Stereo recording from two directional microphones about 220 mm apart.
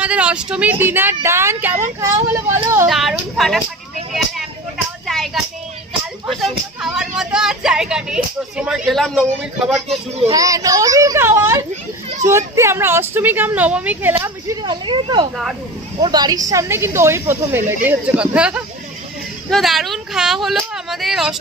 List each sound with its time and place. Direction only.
0.0 s a woman's voice: 5° right (ahead or behind)
2.9 s speech: centre (ahead or behind)
5.0 s a sound: centre (ahead or behind)
6.2 s speech: centre (ahead or behind)
10.2 s a woman's voice: 15° right (ahead or behind)